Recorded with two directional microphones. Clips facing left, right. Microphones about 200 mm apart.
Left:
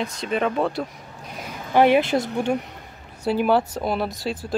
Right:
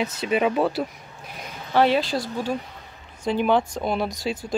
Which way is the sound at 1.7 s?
15° left (ahead or behind).